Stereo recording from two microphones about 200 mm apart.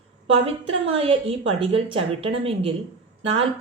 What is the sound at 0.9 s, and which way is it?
Speech, 30° right (ahead or behind).